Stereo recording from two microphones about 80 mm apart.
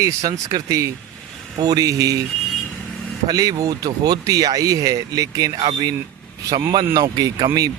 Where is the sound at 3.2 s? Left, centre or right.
Right.